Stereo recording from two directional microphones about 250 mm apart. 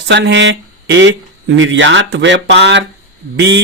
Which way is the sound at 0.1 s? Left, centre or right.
Right.